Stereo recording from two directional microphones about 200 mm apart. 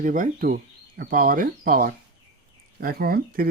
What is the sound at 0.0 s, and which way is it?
Speech, 40° right (ahead or behind).